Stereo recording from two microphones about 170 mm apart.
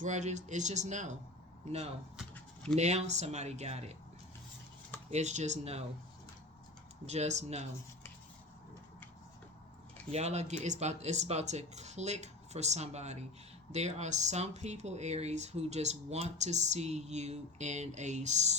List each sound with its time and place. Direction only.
0.0 s speech: 45° right (ahead or behind)
5.1 s speech: 40° right (ahead or behind)
7.0 s speech: 40° right (ahead or behind)
10.1 s speech: 40° right (ahead or behind)